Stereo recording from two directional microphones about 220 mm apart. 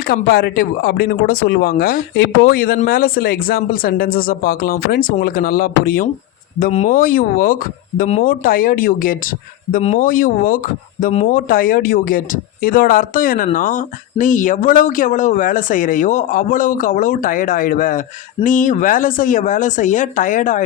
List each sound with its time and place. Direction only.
0.0 s speech: 45° left (ahead or behind)